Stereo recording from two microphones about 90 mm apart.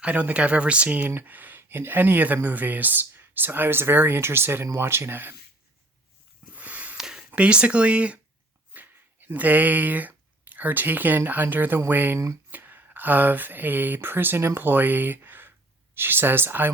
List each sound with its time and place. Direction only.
0.0 s speech: 15° right (ahead or behind)
6.6 s snort: 15° right (ahead or behind)
7.0 s a sound: 5° right (ahead or behind)
7.3 s speech: 15° right (ahead or behind)